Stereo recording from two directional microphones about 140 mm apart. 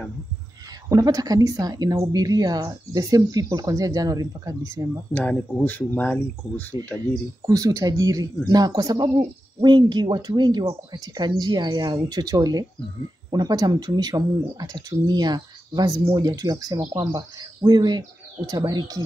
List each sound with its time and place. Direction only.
0.8 s speech: 25° right (ahead or behind)
5.1 s speech: 10° left (ahead or behind)
7.4 s speech: 25° right (ahead or behind)